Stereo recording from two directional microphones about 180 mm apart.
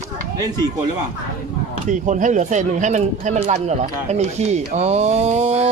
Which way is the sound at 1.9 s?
45° right (ahead or behind).